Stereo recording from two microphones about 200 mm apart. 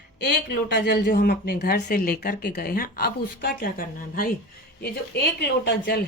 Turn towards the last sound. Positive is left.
turn(degrees=55)  # may be behind; listen again after turning